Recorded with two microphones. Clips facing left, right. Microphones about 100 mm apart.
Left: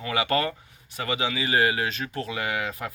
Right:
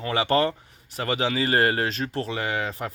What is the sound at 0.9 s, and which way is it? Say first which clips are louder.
Speech: right 3 dB; 40° right (ahead or behind).